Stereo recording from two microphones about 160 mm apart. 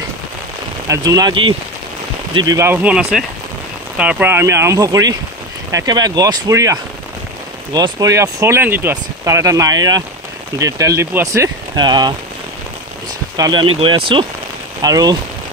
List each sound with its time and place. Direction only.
0.8 s speech: 20° right (ahead or behind)
13.4 s speech: 30° right (ahead or behind)